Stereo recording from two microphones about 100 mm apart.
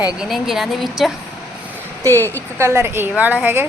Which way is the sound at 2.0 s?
30° right (ahead or behind).